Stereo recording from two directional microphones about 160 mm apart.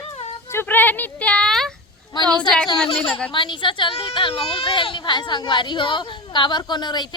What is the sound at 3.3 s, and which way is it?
Speech, 30° left (ahead or behind).